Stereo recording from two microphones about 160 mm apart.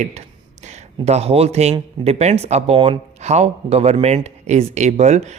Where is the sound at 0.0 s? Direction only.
45° right (ahead or behind).